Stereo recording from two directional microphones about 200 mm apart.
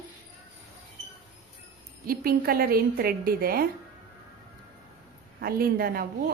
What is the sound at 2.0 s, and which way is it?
A woman's voice, 50° right (ahead or behind).